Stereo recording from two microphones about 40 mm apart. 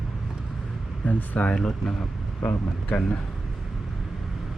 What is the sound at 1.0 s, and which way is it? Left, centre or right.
Speech, left.